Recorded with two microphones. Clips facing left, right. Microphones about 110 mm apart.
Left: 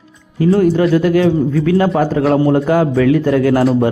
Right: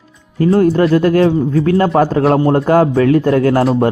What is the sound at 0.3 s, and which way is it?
A man's voice, 40° right (ahead or behind).